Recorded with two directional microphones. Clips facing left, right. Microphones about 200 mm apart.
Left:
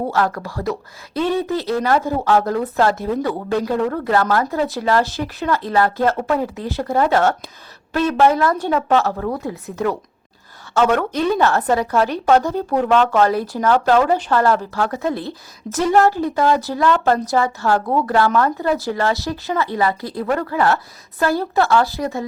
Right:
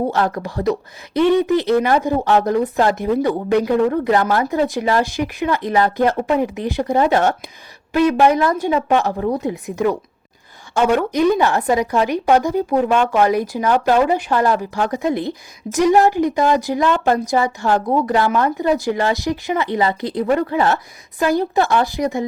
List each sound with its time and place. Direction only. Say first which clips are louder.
0.1 s speech: right 1 dB; 20° right (ahead or behind)